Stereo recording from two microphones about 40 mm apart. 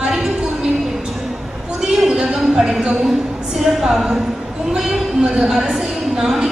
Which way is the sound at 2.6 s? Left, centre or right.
Right.